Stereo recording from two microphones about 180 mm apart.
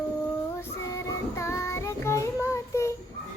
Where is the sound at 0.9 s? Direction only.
15° left (ahead or behind).